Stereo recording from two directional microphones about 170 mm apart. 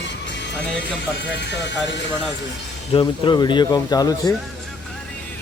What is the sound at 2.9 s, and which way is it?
Speech, 30° left (ahead or behind).